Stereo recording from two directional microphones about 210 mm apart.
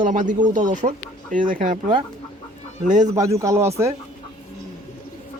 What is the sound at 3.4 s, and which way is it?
Speech, 15° right (ahead or behind).